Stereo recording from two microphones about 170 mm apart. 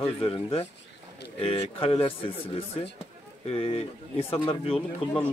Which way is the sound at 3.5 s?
35° left (ahead or behind).